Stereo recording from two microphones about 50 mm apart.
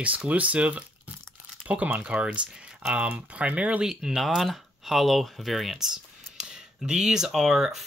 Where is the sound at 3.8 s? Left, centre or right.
Centre.